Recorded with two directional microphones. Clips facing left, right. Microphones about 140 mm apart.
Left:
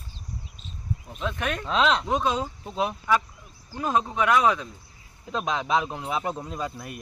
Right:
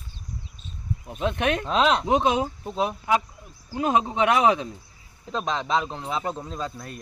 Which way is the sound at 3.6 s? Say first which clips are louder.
Right 3 dB; 15° right (ahead or behind).